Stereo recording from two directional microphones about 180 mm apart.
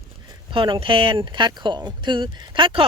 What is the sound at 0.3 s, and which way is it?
Speech, 30° right (ahead or behind).